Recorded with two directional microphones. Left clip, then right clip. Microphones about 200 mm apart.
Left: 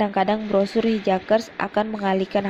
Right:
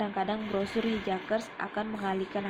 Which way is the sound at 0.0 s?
35° left (ahead or behind).